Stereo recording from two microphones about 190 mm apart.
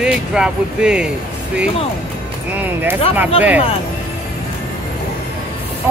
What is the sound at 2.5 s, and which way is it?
Speech, 10° right (ahead or behind).